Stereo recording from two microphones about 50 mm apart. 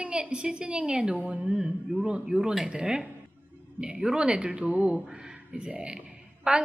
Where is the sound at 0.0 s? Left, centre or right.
Right.